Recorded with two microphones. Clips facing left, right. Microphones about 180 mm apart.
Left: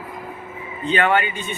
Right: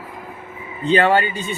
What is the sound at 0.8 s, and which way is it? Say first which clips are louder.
Speech: right 3 dB; 35° right (ahead or behind).